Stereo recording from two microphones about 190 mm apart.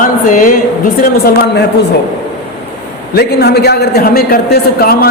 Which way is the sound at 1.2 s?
55° left (ahead or behind).